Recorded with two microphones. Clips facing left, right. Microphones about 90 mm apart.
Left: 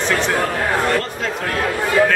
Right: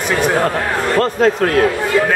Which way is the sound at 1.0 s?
45° right (ahead or behind).